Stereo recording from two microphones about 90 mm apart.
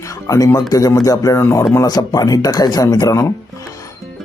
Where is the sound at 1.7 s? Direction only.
40° left (ahead or behind).